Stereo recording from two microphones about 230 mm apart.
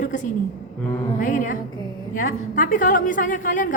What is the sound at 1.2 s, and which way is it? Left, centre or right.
A woman's voice, left.